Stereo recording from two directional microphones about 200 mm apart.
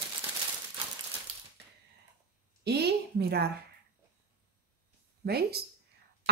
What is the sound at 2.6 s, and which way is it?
Speech, 55° right (ahead or behind).